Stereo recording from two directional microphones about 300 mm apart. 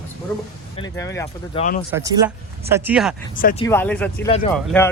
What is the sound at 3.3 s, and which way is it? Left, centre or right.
Speech, left.